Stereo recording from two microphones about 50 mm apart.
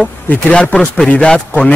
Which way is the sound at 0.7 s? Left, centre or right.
Centre.